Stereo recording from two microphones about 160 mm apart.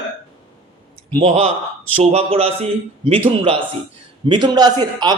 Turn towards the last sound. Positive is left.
turn(degrees=-25)  # may be behind; listen again after turning